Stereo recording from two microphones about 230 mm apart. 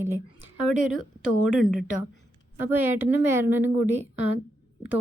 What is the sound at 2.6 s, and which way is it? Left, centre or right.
A woman's voice, centre.